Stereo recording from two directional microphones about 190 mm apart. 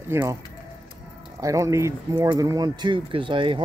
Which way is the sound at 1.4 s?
15° right (ahead or behind).